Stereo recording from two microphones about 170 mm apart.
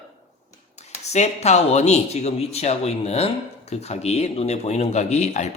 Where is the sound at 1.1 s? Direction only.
40° left (ahead or behind).